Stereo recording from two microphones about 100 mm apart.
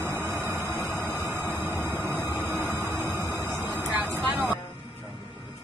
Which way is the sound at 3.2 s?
25° right (ahead or behind).